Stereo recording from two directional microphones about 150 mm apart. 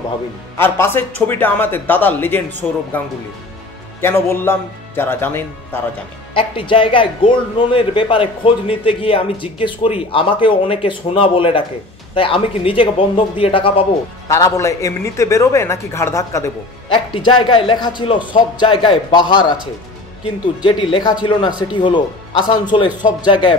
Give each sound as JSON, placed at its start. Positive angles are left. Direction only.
{"t": 0.6, "sound": "a man's voice", "side_deg": 15}
{"t": 4.0, "sound": "a man's voice", "side_deg": 15}
{"t": 6.3, "sound": "a man's voice", "side_deg": 35}
{"t": 14.2, "sound": "a man's voice", "side_deg": 20}
{"t": 16.9, "sound": "a man's voice", "side_deg": 35}